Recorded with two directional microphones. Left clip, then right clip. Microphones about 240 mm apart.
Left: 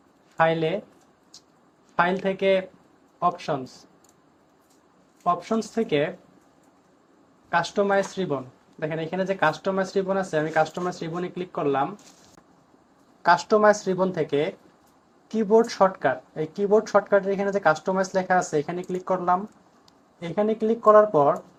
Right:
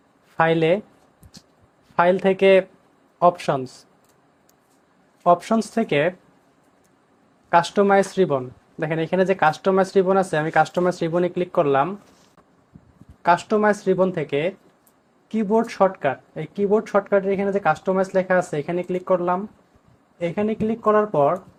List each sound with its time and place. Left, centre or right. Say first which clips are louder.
0.3 s speech: right 4 dB; right
2.0 s speech: right 6 dB; right
5.2 s speech: right 6 dB; right
7.5 s speech: right 6 dB; right
13.2 s speech: even; right